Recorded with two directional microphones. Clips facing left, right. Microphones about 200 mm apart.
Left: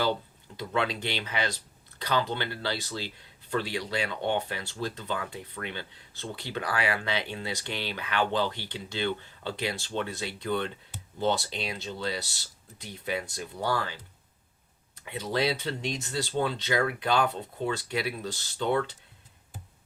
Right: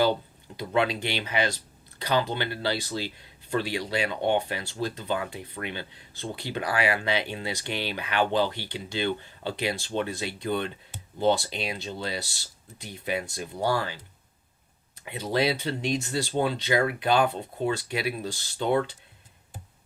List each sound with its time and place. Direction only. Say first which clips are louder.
0.0 s speech: right 4 dB; 15° right (ahead or behind)
15.0 s speech: right 3 dB; 15° right (ahead or behind)